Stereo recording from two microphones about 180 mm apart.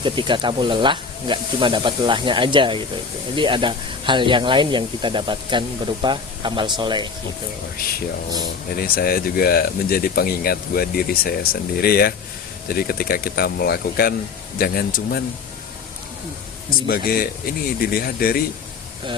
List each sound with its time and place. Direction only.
0.0 s speech: 25° right (ahead or behind)
8.7 s speech: 55° left (ahead or behind)
16.9 s speech: 55° left (ahead or behind)